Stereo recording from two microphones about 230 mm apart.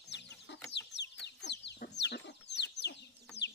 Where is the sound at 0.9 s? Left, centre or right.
Left.